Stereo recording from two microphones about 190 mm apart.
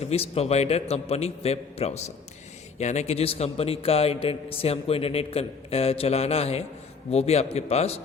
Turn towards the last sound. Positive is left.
turn(degrees=35)  # may be behind; listen again after turning